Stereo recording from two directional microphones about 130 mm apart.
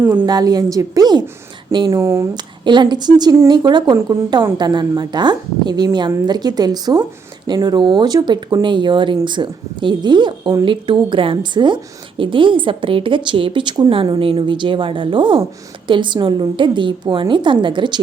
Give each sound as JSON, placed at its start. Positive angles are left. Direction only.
{"t": 0.3, "sound": "a woman's voice", "side_deg": -30}
{"t": 2.3, "sound": "speech", "side_deg": -35}